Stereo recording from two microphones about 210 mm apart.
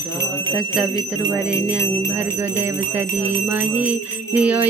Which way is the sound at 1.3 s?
5° right (ahead or behind).